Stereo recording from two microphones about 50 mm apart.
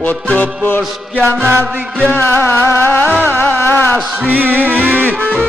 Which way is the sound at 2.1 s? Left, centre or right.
Left.